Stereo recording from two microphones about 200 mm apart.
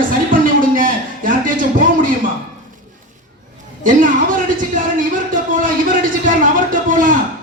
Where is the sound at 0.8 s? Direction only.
40° right (ahead or behind).